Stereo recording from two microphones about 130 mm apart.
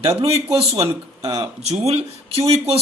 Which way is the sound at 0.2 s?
50° right (ahead or behind).